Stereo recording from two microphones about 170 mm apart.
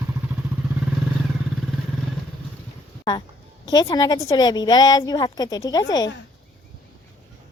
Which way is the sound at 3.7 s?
20° left (ahead or behind).